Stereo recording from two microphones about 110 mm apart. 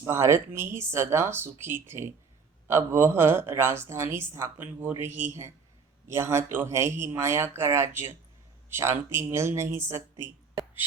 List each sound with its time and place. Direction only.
0.0 s speech: 25° right (ahead or behind)